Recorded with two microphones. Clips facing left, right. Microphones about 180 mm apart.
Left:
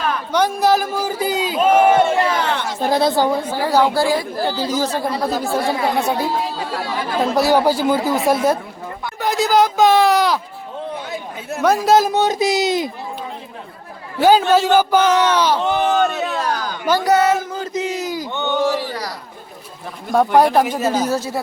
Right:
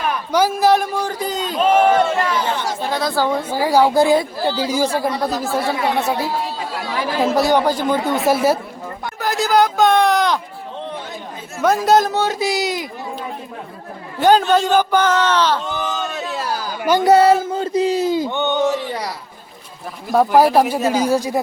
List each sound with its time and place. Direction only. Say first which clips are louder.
0.1 s a man's voice: right 3 dB; 10° right (ahead or behind); by 2.0 s 10° left (ahead or behind)
2.4 s a sound: left 1 dB; 60° left (ahead or behind)
2.9 s speech: left 5 dB; 25° left (ahead or behind)
3.5 s speech: right 6 dB; 10° right (ahead or behind)
4.0 s speech: right 3 dB; 20° right (ahead or behind); by 10.4 s 5° left (ahead or behind)
11.6 s speech: even; centre (ahead or behind)
12.1 s speech: left 2 dB; 20° left (ahead or behind)
14.2 s speech: left 1 dB; 5° left (ahead or behind)
15.6 s speech: left 8 dB; 65° left (ahead or behind)
16.4 s a sound: left 1 dB; 5° right (ahead or behind)
17.0 s speech: right 5 dB; 30° right (ahead or behind)
20.1 s speech: right 1 dB; 5° right (ahead or behind)